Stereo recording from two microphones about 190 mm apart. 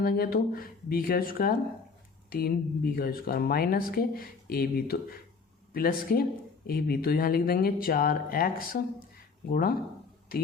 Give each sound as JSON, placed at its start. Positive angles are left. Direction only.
{"t": 0.0, "sound": "speech", "side_deg": 50}